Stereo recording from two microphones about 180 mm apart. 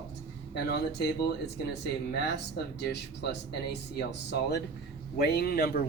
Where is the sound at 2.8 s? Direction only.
70° left (ahead or behind).